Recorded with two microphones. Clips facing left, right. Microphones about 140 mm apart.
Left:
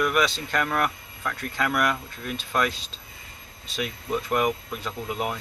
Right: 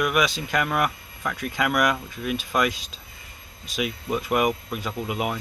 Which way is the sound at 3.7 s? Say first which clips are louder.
Right 2 dB; 5° right (ahead or behind).